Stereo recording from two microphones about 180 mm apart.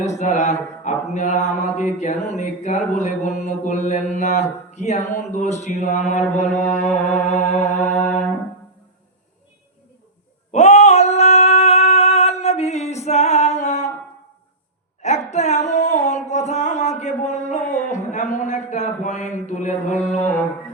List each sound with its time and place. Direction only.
0.0 s mantra: 40° left (ahead or behind)
10.5 s a sound: 40° left (ahead or behind)
15.0 s music: 40° left (ahead or behind)